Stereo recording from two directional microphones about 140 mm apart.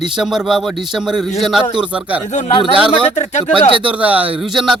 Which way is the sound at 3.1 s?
55° left (ahead or behind).